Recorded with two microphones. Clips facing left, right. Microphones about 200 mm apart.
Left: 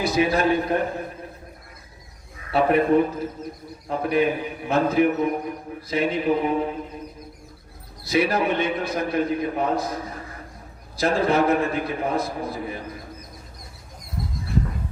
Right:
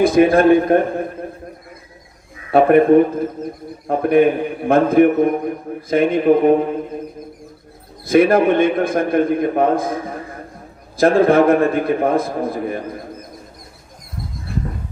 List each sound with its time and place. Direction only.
0.0 s a man's voice: 50° right (ahead or behind)
2.5 s a man's voice: 50° right (ahead or behind)
8.0 s a man's voice: 50° right (ahead or behind)